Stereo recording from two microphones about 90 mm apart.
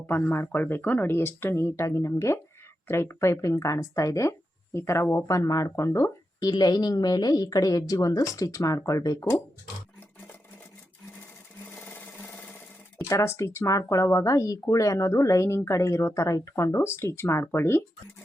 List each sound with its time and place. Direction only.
0.1 s speech: 25° left (ahead or behind)
6.4 s a woman's voice: 50° left (ahead or behind)
11.7 s sewing machine: 15° left (ahead or behind)
13.1 s speech: 35° left (ahead or behind)